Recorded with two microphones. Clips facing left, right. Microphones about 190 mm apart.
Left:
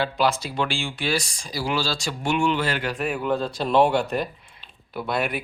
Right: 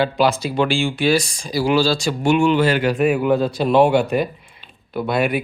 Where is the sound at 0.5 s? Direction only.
80° right.